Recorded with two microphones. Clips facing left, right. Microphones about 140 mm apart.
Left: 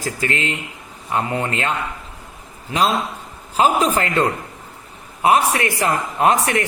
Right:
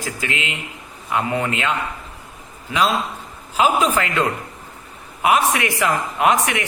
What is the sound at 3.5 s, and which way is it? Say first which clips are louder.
A man's voice: left 1 dB; 35° left (ahead or behind).